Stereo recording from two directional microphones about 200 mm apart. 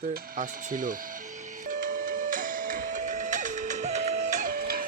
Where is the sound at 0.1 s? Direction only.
45° right (ahead or behind).